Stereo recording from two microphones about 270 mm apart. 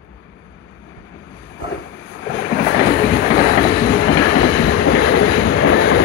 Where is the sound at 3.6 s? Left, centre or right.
Left.